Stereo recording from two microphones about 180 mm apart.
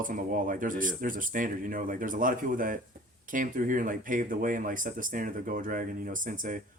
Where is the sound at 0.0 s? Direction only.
50° right (ahead or behind).